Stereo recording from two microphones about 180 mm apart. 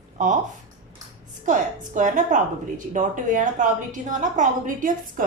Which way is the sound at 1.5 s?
45° right (ahead or behind).